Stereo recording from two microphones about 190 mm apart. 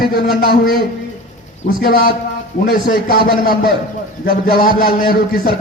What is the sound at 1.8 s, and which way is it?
A man's voice, 50° left (ahead or behind).